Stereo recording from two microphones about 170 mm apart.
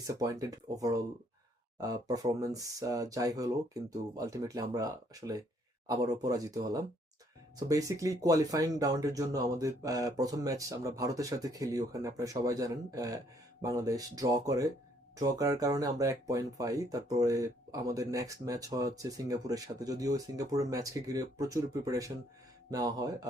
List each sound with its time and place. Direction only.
0.1 s speech: 20° right (ahead or behind)